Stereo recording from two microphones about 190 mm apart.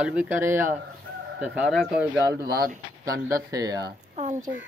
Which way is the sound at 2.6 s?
50° right (ahead or behind).